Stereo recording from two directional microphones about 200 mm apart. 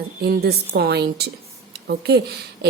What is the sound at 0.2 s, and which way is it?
A woman's voice, 50° right (ahead or behind).